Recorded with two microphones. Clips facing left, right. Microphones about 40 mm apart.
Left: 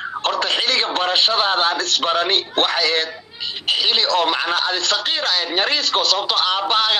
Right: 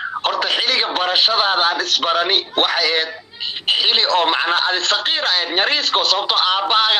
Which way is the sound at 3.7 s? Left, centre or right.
Right.